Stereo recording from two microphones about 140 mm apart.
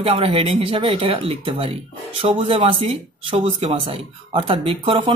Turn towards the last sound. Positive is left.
turn(degrees=-40)  # may be behind; listen again after turning